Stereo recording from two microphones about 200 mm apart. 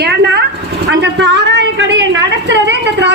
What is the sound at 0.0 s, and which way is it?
Sheep, 55° right (ahead or behind).